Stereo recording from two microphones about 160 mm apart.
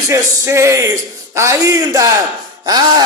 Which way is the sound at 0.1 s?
15° right (ahead or behind).